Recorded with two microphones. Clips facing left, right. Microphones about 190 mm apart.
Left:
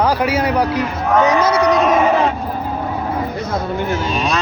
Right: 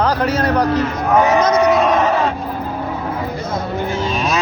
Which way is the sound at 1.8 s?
5° left (ahead or behind).